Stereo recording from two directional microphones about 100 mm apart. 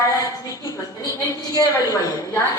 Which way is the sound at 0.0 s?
35° left (ahead or behind).